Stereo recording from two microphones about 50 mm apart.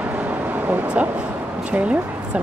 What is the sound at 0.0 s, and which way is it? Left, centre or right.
Vehicle, right.